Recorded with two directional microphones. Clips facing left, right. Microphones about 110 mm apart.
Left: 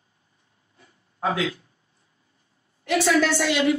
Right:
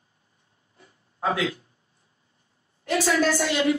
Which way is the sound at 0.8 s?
30° right (ahead or behind).